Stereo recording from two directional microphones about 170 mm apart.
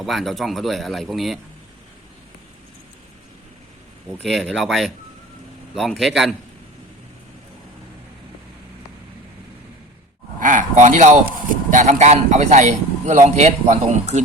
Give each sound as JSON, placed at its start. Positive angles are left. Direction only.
{"t": 0.0, "sound": "speech", "side_deg": 0}
{"t": 4.2, "sound": "speech", "side_deg": 0}
{"t": 10.4, "sound": "a man's voice", "side_deg": -50}